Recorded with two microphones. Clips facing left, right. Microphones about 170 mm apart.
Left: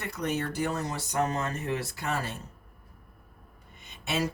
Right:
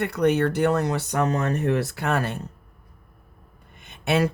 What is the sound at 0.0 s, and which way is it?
Speech, 65° right (ahead or behind).